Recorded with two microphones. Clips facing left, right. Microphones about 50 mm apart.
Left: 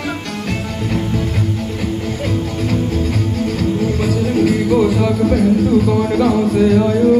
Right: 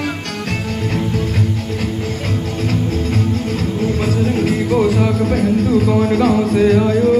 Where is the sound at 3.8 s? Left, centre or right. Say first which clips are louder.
Even; right.